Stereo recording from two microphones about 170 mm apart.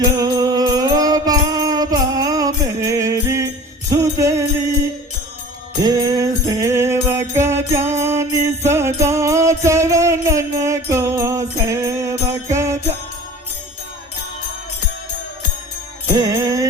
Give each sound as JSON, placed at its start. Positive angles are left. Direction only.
{"t": 0.2, "sound": "music", "side_deg": -20}
{"t": 5.8, "sound": "jingle bell", "side_deg": -20}
{"t": 16.1, "sound": "music", "side_deg": -20}